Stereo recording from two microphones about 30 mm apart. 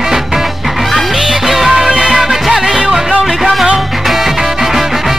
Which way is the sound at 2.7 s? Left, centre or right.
Right.